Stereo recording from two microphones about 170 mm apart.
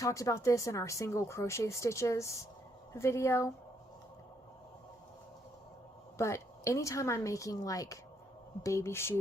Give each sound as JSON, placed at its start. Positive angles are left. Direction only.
{"t": 0.0, "sound": "speech", "side_deg": 20}
{"t": 6.1, "sound": "a woman's voice", "side_deg": 15}